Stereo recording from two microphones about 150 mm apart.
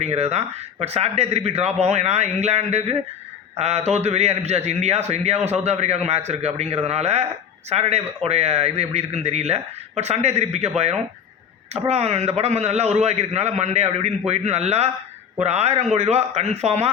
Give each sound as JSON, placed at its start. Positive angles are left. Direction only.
{"t": 0.0, "sound": "a man's voice", "side_deg": -45}